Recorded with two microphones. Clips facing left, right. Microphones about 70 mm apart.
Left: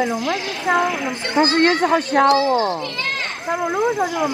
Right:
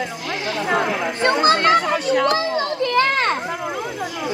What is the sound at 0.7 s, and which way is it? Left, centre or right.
Speech, right.